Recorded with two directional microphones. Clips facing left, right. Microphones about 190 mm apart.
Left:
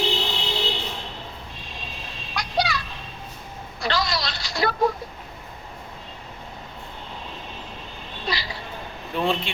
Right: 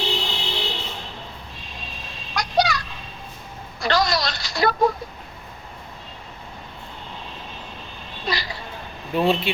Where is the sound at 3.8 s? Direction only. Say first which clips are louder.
Right 4 dB; 45° right (ahead or behind).